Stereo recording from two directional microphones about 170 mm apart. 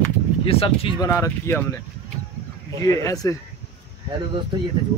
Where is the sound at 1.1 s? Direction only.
15° left (ahead or behind).